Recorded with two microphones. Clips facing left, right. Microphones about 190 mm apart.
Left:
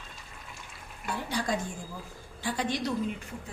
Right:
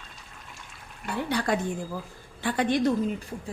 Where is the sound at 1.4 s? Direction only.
65° right (ahead or behind).